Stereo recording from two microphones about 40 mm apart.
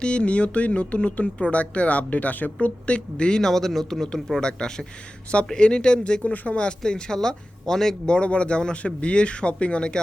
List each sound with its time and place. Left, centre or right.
0.0 s speech: left
2.6 s speech: left
3.4 s speech: centre
4.4 s speech: centre
6.2 s speech: left
6.6 s speech: left
8.1 s speech: left